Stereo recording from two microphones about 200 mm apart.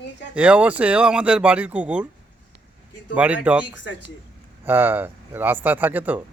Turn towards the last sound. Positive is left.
turn(degrees=-10)  # may be behind; listen again after turning